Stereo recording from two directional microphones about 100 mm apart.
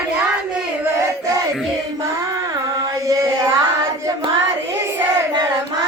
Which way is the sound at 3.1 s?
35° right (ahead or behind).